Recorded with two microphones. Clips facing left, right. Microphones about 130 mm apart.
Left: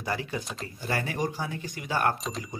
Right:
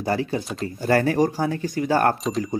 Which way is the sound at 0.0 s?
35° right (ahead or behind).